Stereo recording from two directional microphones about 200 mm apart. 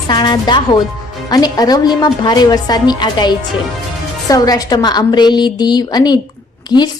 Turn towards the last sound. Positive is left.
turn(degrees=20)  # may be behind; listen again after turning